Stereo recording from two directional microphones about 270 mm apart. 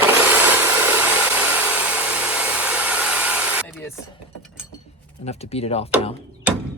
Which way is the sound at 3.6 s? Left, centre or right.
Centre.